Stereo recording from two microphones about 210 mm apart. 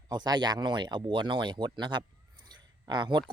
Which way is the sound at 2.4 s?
20° right (ahead or behind).